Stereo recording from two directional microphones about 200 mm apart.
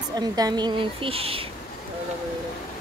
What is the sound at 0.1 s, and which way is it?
A woman's voice, 20° right (ahead or behind).